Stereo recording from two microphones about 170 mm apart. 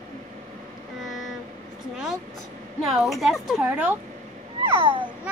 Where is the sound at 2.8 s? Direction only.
Centre (ahead or behind).